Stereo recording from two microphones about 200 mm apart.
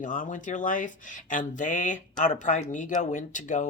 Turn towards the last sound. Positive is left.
turn(degrees=40)  # may be behind; listen again after turning